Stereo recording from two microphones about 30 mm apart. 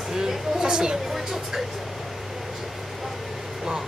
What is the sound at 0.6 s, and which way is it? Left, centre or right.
Speech, right.